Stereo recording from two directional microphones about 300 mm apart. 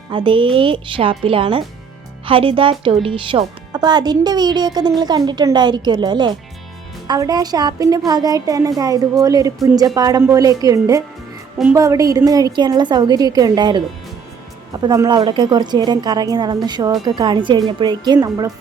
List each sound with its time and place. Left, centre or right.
0.1 s speech: centre